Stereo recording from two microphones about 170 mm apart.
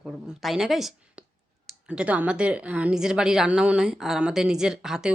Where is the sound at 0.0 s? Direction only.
5° right (ahead or behind).